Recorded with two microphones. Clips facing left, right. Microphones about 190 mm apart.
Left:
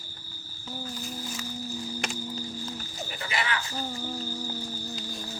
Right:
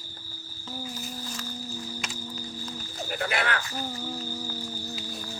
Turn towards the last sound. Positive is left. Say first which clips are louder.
# right 3 dB
turn(degrees=-55)  # may be behind; listen again after turning